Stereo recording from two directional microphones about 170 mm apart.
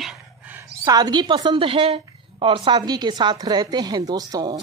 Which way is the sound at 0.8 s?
25° right (ahead or behind).